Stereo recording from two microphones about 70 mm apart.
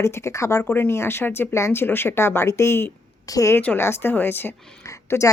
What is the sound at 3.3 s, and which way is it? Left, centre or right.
Speech, left.